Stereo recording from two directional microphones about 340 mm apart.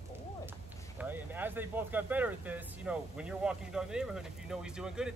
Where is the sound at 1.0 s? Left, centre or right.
Centre.